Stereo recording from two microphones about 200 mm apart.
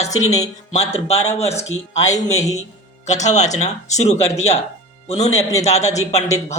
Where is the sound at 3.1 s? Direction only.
35° left (ahead or behind).